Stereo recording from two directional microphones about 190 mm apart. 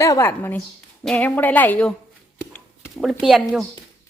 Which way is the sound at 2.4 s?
15° left (ahead or behind).